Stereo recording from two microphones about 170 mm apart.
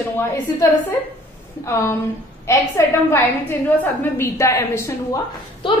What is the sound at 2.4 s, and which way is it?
A woman's voice, 15° left (ahead or behind).